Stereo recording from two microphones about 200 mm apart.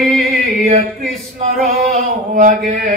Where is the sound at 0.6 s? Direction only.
40° right (ahead or behind).